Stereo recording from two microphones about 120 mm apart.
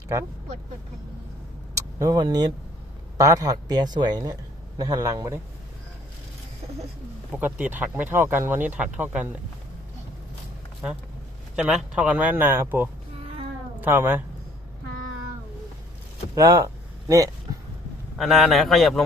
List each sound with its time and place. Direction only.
2.0 s speech: 30° right (ahead or behind)
7.3 s speech: 15° right (ahead or behind)
11.5 s speech: 10° right (ahead or behind)
16.3 s speech: 30° right (ahead or behind)
18.2 s a man's voice: centre (ahead or behind)